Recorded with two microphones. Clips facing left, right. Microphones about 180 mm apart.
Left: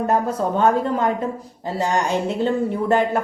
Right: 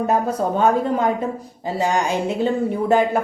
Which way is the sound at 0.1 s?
15° right (ahead or behind).